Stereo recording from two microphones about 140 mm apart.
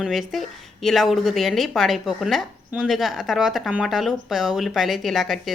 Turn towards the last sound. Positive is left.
turn(degrees=0)  # may be behind; listen again after turning